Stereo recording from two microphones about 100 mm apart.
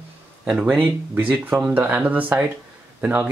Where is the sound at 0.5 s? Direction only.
15° right (ahead or behind).